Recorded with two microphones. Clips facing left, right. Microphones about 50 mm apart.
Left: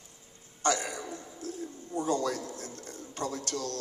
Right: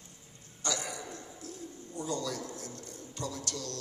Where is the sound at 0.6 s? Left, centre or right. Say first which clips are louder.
Left 7 dB; left.